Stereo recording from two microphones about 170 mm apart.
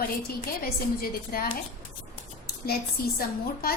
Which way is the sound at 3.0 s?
60° left (ahead or behind).